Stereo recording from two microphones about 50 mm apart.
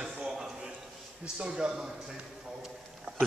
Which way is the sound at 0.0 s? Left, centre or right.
Centre.